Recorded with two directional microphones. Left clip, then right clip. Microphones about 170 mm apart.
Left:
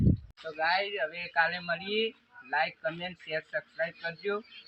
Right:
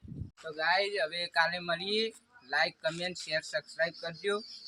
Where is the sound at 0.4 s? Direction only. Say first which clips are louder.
Even; 30° right (ahead or behind).